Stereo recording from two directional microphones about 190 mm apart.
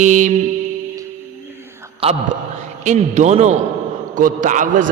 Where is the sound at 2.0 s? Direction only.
30° right (ahead or behind).